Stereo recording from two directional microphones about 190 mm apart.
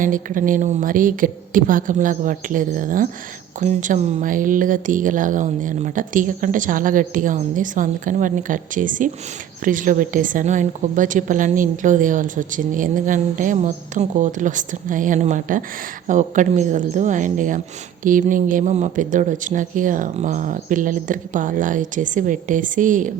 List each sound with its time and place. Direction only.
0.0 s a woman's voice: 45° right (ahead or behind)